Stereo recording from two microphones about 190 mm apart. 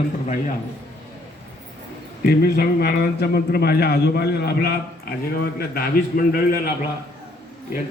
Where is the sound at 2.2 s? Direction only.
55° left (ahead or behind).